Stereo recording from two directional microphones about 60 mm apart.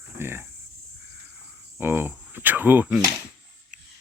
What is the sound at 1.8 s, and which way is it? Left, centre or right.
Speech, right.